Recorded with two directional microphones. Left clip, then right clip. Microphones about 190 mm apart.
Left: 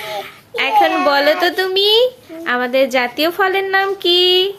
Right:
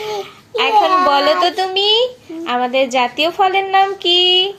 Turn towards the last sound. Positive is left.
turn(degrees=15)  # may be behind; listen again after turning